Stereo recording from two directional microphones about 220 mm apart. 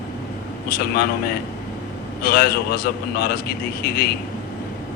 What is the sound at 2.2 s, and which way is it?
A man's voice, 45° left (ahead or behind).